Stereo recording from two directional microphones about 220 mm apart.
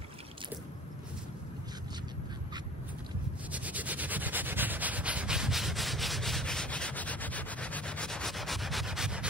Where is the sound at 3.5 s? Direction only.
5° right (ahead or behind).